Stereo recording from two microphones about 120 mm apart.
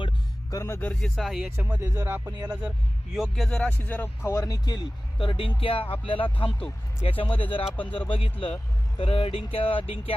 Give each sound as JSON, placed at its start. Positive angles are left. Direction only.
{"t": 0.5, "sound": "speech", "side_deg": 20}
{"t": 1.1, "sound": "speech", "side_deg": 0}
{"t": 1.8, "sound": "speech", "side_deg": -25}
{"t": 2.2, "sound": "speech", "side_deg": -10}